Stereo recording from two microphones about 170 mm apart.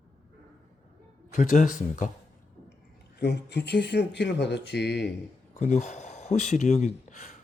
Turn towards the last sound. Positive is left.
turn(degrees=50)  # may be behind; listen again after turning